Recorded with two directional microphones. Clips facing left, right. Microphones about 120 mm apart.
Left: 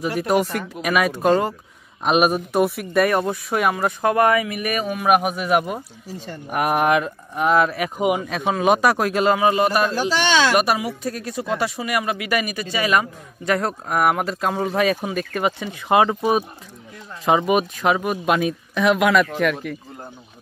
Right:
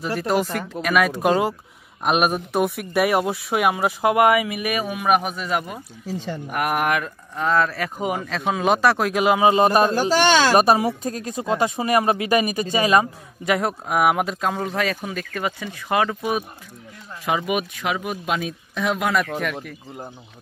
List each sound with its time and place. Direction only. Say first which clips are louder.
0.3 s speech: left 1 dB; centre (ahead or behind)
9.4 s a woman's voice: right 2 dB; 25° right (ahead or behind)
9.8 s speech: right 3 dB; 45° right (ahead or behind)
10.6 s a woman's voice: right 4 dB; 30° right (ahead or behind)
11.7 s a woman's voice: right 4 dB; 35° right (ahead or behind)
13.5 s speech: even; 5° right (ahead or behind)
14.7 s speech: left 4 dB; 20° left (ahead or behind)
17.5 s speech: left 5 dB; 35° left (ahead or behind)
17.9 s speech: left 5 dB; 55° left (ahead or behind); by 19.2 s 90° left